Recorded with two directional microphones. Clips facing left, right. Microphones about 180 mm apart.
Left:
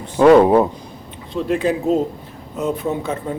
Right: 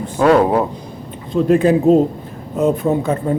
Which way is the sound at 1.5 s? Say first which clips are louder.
Right 6 dB; 50° right (ahead or behind).